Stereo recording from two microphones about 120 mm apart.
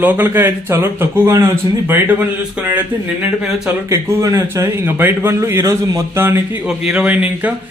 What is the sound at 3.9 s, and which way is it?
A man's voice, 25° right (ahead or behind).